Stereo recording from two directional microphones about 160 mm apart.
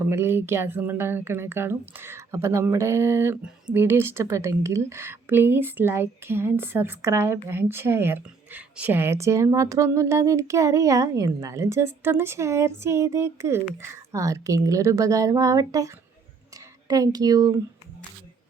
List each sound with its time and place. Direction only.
0.0 s speech: 15° right (ahead or behind)
16.9 s speech: 25° right (ahead or behind)